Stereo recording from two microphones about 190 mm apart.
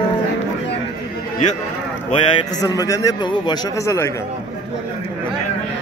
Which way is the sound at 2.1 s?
20° left (ahead or behind).